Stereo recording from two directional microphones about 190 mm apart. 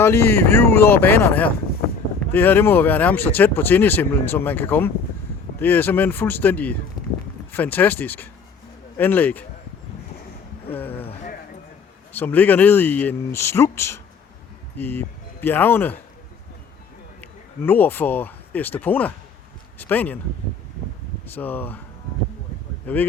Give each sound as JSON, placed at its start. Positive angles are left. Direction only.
{"t": 0.0, "sound": "speech", "side_deg": 15}
{"t": 10.7, "sound": "a sound", "side_deg": 10}
{"t": 11.0, "sound": "a sound", "side_deg": 40}
{"t": 12.1, "sound": "speech", "side_deg": 10}
{"t": 17.7, "sound": "speech", "side_deg": 10}
{"t": 21.2, "sound": "speech", "side_deg": 10}
{"t": 22.9, "sound": "speech", "side_deg": 10}